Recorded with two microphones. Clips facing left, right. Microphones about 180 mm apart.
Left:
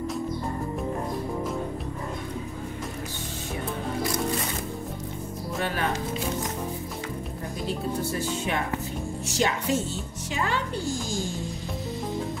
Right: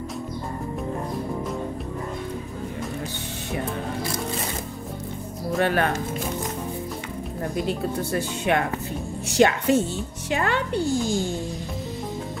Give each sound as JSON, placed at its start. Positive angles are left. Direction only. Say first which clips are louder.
{"t": 5.6, "sound": "speech", "louder": "right 6 dB", "side_deg": -60}
{"t": 8.1, "sound": "speech", "louder": "right 5 dB", "side_deg": -65}